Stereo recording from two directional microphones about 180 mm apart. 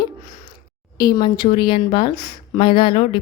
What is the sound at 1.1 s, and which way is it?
A woman's voice, 25° left (ahead or behind).